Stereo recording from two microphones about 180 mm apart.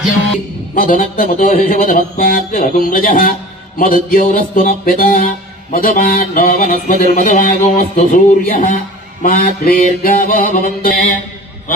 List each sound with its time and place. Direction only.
0.7 s speech: 50° left (ahead or behind)